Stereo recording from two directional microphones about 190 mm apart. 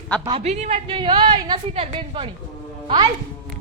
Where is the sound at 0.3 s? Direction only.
35° right (ahead or behind).